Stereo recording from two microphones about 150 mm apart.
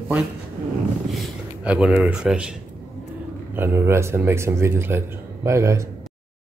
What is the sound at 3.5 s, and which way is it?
A man's voice, 15° right (ahead or behind).